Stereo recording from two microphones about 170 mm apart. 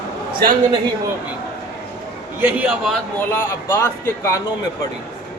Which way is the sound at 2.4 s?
10° right (ahead or behind).